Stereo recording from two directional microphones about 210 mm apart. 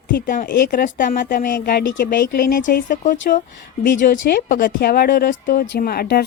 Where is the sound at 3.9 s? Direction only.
55° left (ahead or behind).